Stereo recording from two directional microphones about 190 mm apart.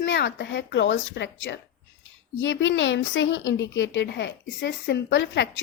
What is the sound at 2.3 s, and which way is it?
Speech, 85° left.